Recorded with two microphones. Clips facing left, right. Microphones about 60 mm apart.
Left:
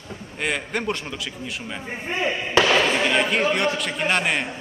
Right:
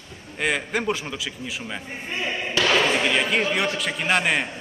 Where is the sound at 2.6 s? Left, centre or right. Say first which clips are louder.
Even; centre.